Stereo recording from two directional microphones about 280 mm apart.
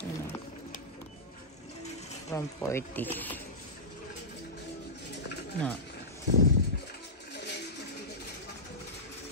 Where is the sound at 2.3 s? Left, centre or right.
Centre.